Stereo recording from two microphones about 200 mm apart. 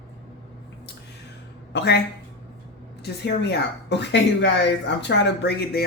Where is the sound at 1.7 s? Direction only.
55° left (ahead or behind).